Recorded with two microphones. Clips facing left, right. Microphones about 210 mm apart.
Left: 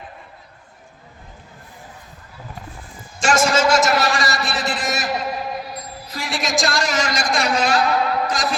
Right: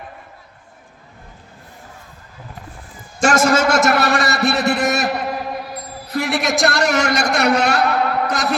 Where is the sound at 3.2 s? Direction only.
60° right (ahead or behind).